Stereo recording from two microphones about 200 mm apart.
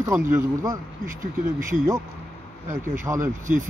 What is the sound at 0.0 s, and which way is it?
Speech, 15° right (ahead or behind).